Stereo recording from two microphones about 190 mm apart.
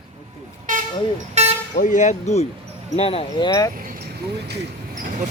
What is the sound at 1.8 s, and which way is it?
Speech, 40° left (ahead or behind).